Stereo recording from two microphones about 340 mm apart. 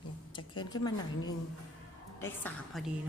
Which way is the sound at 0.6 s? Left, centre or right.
Centre.